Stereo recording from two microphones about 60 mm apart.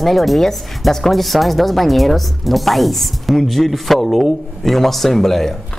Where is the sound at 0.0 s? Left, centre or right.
Centre.